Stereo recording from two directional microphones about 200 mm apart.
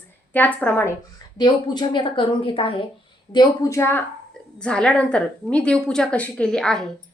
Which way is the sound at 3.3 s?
15° left (ahead or behind).